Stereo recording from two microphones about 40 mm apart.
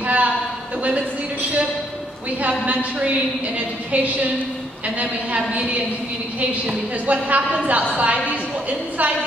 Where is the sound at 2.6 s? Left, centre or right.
Right.